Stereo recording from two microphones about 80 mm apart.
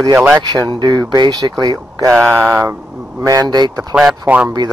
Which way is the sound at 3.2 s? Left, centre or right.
Right.